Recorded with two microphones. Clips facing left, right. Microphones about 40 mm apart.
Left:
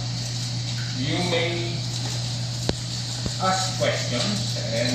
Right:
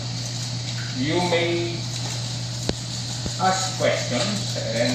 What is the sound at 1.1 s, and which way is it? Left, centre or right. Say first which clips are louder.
Speech: right 3 dB; centre.